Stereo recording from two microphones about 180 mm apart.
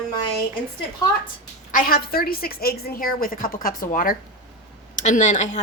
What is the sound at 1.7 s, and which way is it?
A woman's voice, 50° left (ahead or behind).